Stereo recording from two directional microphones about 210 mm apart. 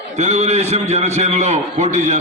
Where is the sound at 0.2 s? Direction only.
35° right (ahead or behind).